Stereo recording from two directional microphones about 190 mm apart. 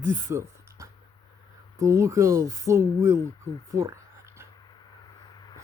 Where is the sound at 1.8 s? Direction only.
15° right (ahead or behind).